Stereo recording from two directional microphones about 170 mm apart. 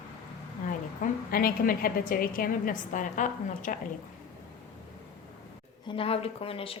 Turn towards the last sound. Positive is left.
turn(degrees=35)  # may be behind; listen again after turning